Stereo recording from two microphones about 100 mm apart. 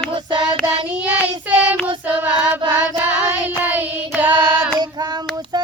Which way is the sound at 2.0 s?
15° right (ahead or behind).